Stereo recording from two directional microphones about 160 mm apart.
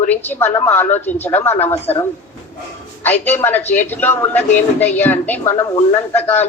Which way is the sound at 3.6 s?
50° left (ahead or behind).